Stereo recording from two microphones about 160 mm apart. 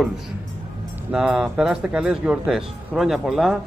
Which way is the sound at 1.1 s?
Centre (ahead or behind).